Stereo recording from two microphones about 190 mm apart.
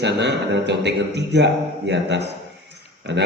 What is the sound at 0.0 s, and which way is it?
A man's voice, 65° right (ahead or behind).